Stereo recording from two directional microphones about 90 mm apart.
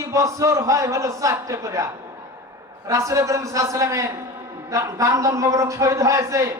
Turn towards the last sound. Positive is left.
turn(degrees=-35)  # may be behind; listen again after turning